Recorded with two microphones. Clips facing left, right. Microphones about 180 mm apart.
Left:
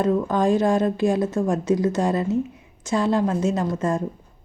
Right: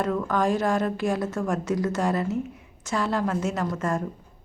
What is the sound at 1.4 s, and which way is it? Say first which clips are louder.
A woman's voice: left 5 dB; 30° left (ahead or behind).